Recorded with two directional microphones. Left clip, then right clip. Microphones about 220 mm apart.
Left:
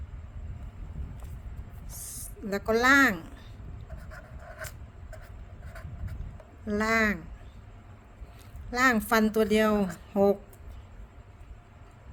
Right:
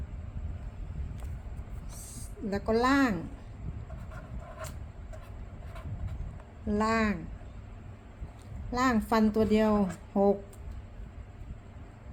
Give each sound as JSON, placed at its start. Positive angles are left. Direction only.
{"t": 1.9, "sound": "a sound", "side_deg": 25}
{"t": 6.7, "sound": "speech", "side_deg": 20}
{"t": 8.7, "sound": "speech", "side_deg": 30}